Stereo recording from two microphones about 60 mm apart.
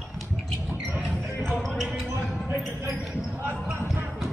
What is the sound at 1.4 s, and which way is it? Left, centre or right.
Music, centre.